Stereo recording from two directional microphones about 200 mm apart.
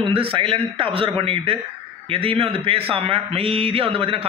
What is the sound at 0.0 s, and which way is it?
A man's voice, 25° right (ahead or behind).